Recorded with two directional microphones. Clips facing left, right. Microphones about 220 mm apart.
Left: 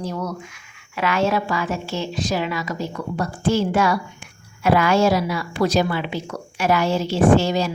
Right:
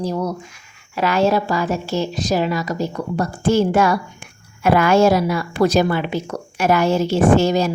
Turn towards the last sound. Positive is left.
turn(degrees=-45)  # may be behind; listen again after turning